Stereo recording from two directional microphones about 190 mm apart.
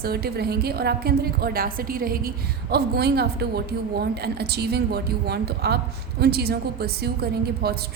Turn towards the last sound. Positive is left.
turn(degrees=-55)  # may be behind; listen again after turning